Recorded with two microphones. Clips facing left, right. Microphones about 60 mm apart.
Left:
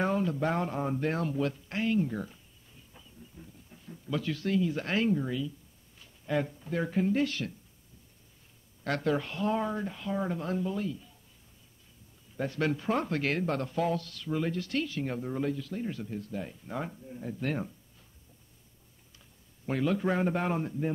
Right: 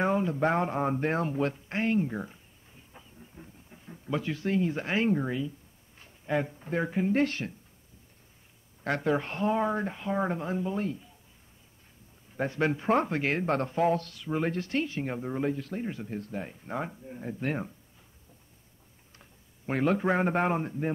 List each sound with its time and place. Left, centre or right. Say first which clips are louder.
0.0 s speech: right 2 dB; right
2.9 s a sound: right 1 dB; right
4.7 s speech: right 1 dB; right
5.0 s speech: right 1 dB; right
6.2 s speech: right 1 dB; right
7.1 s speech: right 2 dB; right
8.8 s speech: right 2 dB; right
9.2 s speech: right 3 dB; right
10.4 s speech: right 1 dB; right
12.4 s speech: right 2 dB; right
15.5 s speech: right 1 dB; right
16.7 s speech: right 2 dB; right
19.7 s speech: right 3 dB; right